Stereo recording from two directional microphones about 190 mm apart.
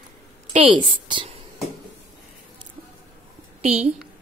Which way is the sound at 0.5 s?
25° right (ahead or behind).